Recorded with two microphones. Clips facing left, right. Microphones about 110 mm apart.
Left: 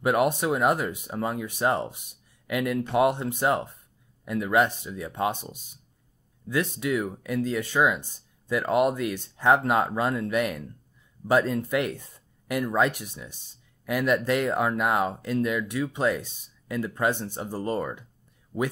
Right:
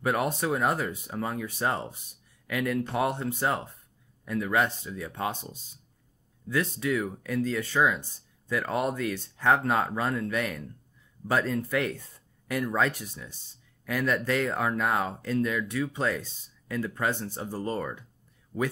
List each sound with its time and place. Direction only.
0.0 s speech: 15° left (ahead or behind)